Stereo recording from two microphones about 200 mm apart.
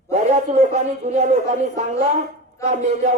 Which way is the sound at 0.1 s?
35° right (ahead or behind).